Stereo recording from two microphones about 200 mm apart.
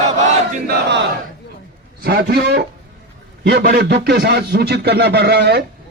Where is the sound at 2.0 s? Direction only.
50° right (ahead or behind).